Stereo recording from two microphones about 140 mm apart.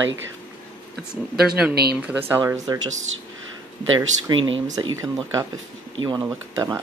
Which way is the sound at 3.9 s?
25° right (ahead or behind).